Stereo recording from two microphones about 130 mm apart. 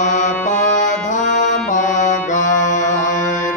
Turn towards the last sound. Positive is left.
turn(degrees=75)  # may be behind; listen again after turning